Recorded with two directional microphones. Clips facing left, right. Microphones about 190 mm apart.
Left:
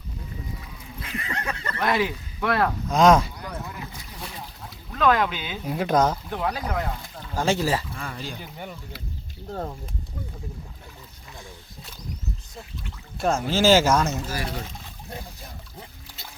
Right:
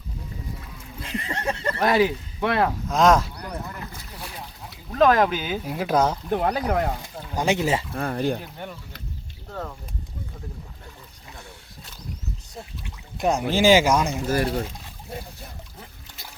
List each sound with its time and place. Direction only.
1.0 s a sound: 30° right (ahead or behind)
2.9 s a sound: centre (ahead or behind)
4.9 s speech: 40° right (ahead or behind)
5.6 s speech: 5° right (ahead or behind)
6.3 s speech: 45° right (ahead or behind)
7.3 s speech: 15° right (ahead or behind)
7.9 s speech: 55° right (ahead or behind)
8.4 s speech: 5° left (ahead or behind)
9.5 s speech: 35° left (ahead or behind)
13.1 s speech: 15° right (ahead or behind)